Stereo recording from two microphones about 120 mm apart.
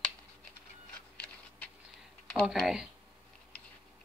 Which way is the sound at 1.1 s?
10° left (ahead or behind).